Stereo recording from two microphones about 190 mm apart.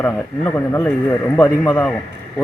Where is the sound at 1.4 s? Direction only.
15° left (ahead or behind).